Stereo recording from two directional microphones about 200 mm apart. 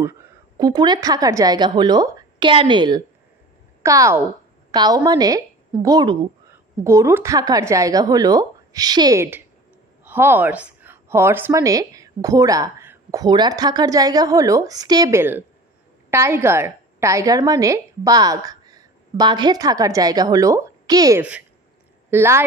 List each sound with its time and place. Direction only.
0.6 s a woman's voice: 20° right (ahead or behind)
21.2 s a woman's voice: 5° right (ahead or behind)